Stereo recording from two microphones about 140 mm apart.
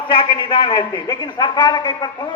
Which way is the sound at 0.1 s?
35° left (ahead or behind).